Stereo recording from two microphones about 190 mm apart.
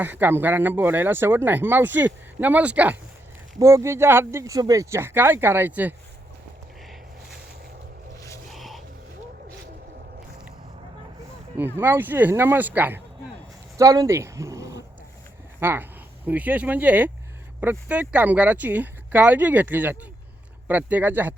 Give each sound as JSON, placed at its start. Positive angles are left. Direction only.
{"t": 0.0, "sound": "speech", "side_deg": -10}
{"t": 8.5, "sound": "a sound", "side_deg": 0}
{"t": 11.8, "sound": "speech", "side_deg": -10}